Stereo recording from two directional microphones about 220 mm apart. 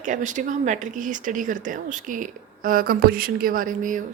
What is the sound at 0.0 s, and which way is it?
Speech, 35° right (ahead or behind).